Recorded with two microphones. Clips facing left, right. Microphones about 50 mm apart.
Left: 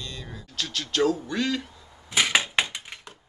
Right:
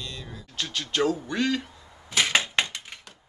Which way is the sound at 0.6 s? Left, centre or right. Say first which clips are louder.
Left 1 dB; centre.